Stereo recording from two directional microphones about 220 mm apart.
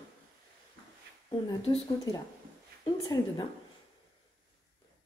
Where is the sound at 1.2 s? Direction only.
20° left (ahead or behind).